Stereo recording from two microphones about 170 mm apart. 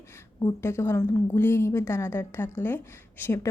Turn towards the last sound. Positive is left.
turn(degrees=15)  # may be behind; listen again after turning